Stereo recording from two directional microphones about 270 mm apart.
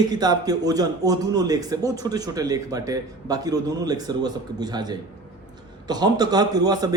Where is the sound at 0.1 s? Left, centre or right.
Centre.